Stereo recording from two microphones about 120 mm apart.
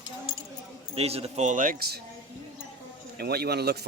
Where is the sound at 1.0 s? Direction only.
60° right (ahead or behind); by 1.7 s 80° right.